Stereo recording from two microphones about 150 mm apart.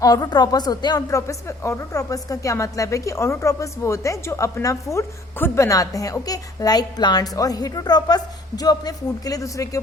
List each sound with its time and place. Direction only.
0.0 s a woman's voice: 25° left (ahead or behind)